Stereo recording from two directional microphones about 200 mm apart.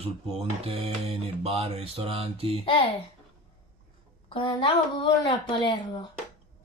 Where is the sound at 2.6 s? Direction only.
25° left (ahead or behind).